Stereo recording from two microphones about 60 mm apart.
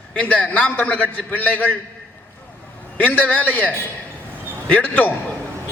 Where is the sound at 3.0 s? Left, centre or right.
Left.